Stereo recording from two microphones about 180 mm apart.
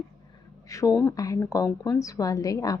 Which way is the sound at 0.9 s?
5° left (ahead or behind).